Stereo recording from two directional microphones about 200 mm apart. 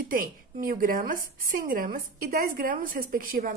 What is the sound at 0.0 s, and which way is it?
Speech, 45° right (ahead or behind).